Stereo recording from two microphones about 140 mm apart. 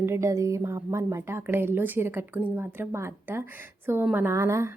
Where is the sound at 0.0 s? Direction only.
20° right (ahead or behind).